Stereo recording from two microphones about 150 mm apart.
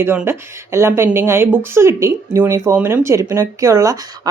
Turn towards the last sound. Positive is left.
turn(degrees=-20)  # may be behind; listen again after turning